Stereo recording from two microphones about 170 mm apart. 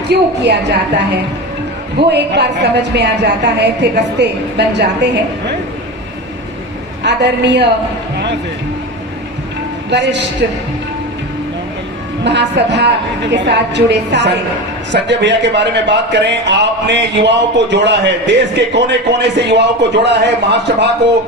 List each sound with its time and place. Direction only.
0.1 s a woman's voice: 85° right
7.0 s speech: 90° right
9.9 s speech: 90° right
12.2 s speech: 90° right